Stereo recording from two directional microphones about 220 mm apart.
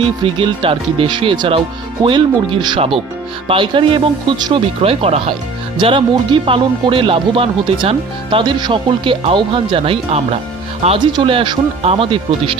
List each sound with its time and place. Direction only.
0.2 s speech: 20° right (ahead or behind)